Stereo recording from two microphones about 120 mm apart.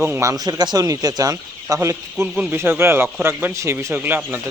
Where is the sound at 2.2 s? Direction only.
10° right (ahead or behind).